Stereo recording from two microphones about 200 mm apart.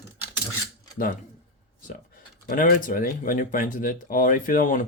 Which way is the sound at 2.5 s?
45° left (ahead or behind).